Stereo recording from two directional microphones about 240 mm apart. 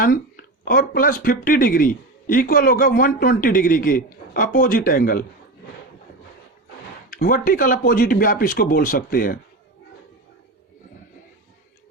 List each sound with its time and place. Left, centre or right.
0.0 s speech: left
7.1 s speech: left